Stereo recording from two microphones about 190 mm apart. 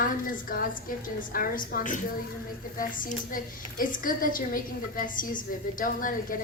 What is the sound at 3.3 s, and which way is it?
A woman's voice, 45° left (ahead or behind).